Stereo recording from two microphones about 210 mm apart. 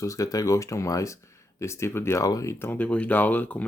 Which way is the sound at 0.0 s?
15° left (ahead or behind).